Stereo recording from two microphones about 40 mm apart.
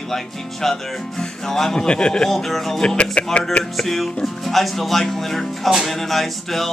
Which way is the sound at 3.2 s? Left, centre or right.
Left.